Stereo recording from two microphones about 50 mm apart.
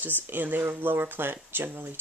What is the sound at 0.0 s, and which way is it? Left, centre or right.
Speech, right.